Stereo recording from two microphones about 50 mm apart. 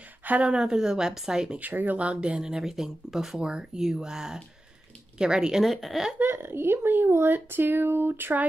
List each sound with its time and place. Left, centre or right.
0.2 s a sound: right
0.5 s speech: centre
1.6 s speech: right
2.0 s speech: right; by 3.3 s centre
3.3 s speech: centre
5.6 s speech: centre
6.1 s speech: right